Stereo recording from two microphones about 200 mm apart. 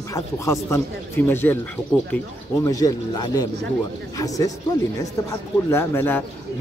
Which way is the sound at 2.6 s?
20° left (ahead or behind).